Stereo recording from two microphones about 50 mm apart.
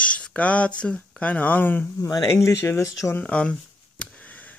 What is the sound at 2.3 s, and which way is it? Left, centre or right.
Speech, left.